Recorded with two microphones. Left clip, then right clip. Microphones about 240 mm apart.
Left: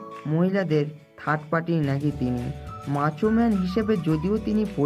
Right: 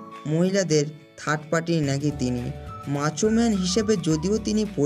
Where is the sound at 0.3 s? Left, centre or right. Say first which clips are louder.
Right 2 dB; right.